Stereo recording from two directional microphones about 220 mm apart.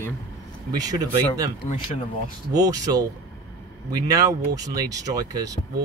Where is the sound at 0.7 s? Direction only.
15° right (ahead or behind).